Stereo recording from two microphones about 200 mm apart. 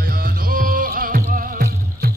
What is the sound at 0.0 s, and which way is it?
Music, 50° right (ahead or behind).